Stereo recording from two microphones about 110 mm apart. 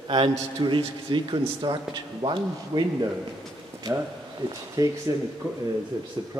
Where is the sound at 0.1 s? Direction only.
45° right (ahead or behind).